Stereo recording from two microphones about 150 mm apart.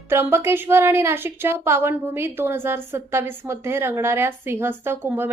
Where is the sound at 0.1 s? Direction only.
15° right (ahead or behind).